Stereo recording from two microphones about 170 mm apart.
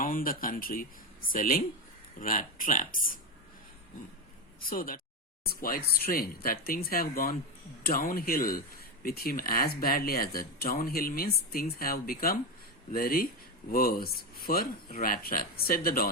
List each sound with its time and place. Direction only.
0.0 s speech: 55° left (ahead or behind)
4.6 s speech: 55° left (ahead or behind)